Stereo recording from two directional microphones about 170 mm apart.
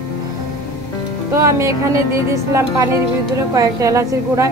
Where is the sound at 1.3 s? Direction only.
15° right (ahead or behind).